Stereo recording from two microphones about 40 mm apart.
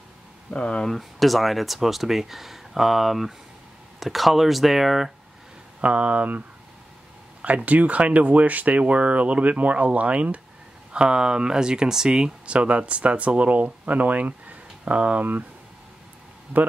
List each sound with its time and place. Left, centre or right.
0.5 s speech: left
0.8 s speech: centre
5.8 s speech: right
7.4 s speech: right
10.9 s speech: right